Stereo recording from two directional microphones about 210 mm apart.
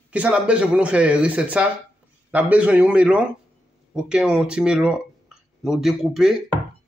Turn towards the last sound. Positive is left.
turn(degrees=0)  # may be behind; listen again after turning